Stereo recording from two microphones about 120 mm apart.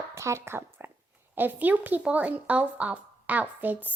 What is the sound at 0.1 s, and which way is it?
A child's voice, 25° right (ahead or behind).